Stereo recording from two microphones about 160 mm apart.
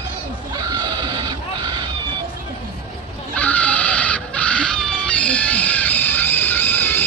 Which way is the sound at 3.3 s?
10° left (ahead or behind).